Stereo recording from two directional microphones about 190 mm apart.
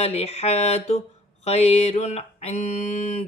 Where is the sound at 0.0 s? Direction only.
35° left (ahead or behind).